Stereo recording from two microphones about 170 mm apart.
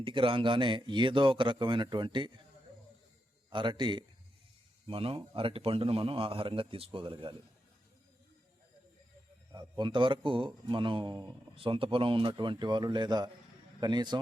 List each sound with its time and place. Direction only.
0.0 s speech: 30° right (ahead or behind)
3.5 s a man's voice: 30° right (ahead or behind)
9.5 s speech: 25° right (ahead or behind)